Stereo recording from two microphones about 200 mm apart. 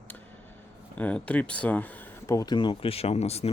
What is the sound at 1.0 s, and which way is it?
Speech, 5° left (ahead or behind).